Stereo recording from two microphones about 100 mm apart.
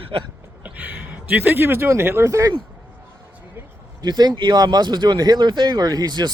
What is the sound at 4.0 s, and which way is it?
Speech, 45° right (ahead or behind).